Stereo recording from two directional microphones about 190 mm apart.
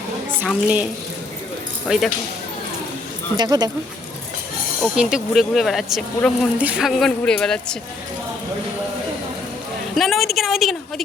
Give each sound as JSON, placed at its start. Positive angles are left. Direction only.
{"t": 0.4, "sound": "a woman's voice", "side_deg": -5}
{"t": 1.9, "sound": "speech", "side_deg": -5}
{"t": 3.3, "sound": "speech", "side_deg": -20}
{"t": 4.8, "sound": "speech", "side_deg": -5}
{"t": 9.9, "sound": "a sound", "side_deg": 0}